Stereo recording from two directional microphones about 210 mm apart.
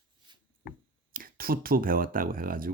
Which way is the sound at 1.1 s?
45° right (ahead or behind).